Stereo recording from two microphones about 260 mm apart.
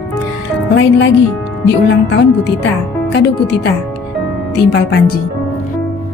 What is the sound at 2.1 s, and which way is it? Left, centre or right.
Speech, left.